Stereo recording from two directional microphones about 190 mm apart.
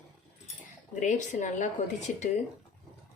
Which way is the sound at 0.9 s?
40° left (ahead or behind).